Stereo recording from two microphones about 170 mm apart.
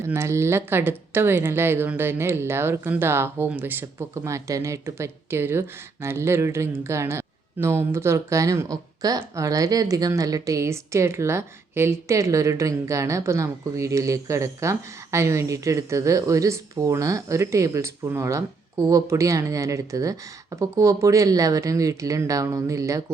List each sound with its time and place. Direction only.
0.0 s speech: 15° right (ahead or behind)